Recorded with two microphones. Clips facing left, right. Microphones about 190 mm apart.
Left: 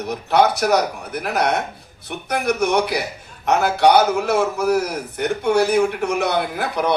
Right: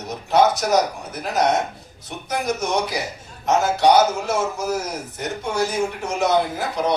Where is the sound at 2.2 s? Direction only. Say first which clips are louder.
Left 4 dB; 60° left (ahead or behind).